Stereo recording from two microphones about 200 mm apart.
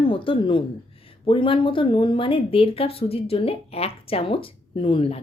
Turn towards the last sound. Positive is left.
turn(degrees=30)  # may be behind; listen again after turning